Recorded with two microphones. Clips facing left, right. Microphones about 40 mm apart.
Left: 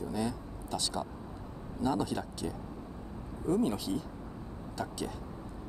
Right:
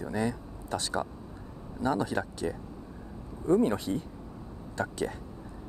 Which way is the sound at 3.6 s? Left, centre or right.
Right.